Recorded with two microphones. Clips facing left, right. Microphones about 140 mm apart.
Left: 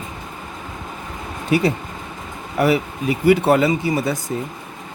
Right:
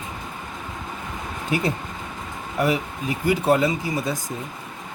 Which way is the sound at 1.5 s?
85° left.